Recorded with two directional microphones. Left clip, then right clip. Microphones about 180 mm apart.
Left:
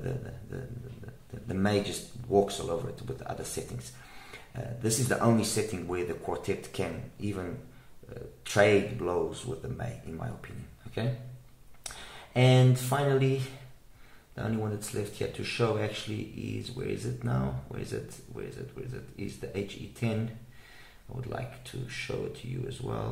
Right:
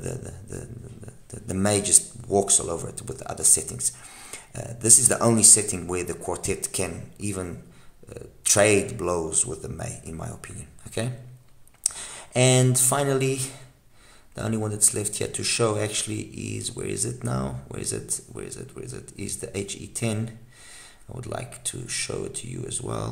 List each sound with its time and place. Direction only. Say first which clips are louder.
0.0 s a sound: right 3 dB; 45° right (ahead or behind)
1.5 s speech: right 6 dB; 45° right (ahead or behind)
11.8 s speech: right 9 dB; 50° right (ahead or behind)
14.3 s speech: right 5 dB; 55° right (ahead or behind)
21.2 s speech: right 5 dB; 55° right (ahead or behind)